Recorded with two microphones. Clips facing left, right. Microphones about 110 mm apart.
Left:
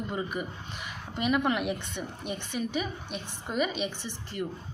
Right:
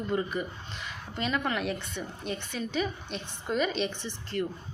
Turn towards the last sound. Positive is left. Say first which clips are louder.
# right 3 dB
turn(degrees=10)  # may be behind; listen again after turning